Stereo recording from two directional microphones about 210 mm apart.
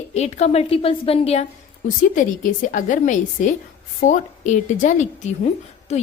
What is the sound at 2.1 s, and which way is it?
A woman's voice, 40° left (ahead or behind).